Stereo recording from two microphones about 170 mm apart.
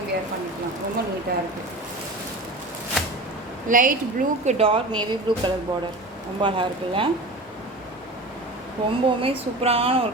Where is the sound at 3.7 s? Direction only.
55° right (ahead or behind).